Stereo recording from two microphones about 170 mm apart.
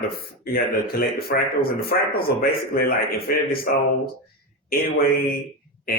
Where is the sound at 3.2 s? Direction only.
60° left (ahead or behind).